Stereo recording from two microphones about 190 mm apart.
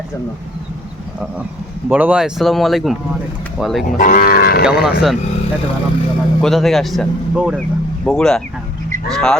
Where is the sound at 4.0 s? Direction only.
50° left (ahead or behind).